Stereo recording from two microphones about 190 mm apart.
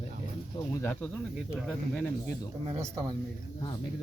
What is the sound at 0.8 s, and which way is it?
Speech, 10° left (ahead or behind).